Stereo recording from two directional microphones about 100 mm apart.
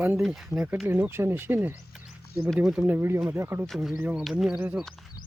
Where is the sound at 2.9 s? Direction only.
25° right (ahead or behind).